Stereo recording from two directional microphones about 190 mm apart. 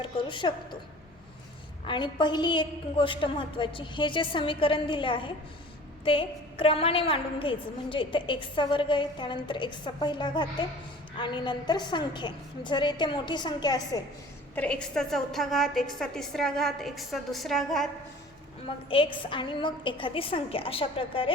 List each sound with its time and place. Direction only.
0.0 s a woman's voice: 25° left (ahead or behind)
1.9 s a woman's voice: 25° left (ahead or behind)
14.5 s a woman's voice: 5° left (ahead or behind)
18.9 s a woman's voice: 25° left (ahead or behind)